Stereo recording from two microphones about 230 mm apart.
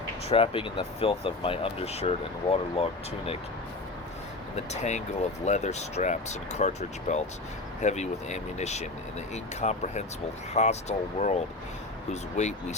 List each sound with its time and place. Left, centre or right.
0.3 s speech: left
4.5 s speech: left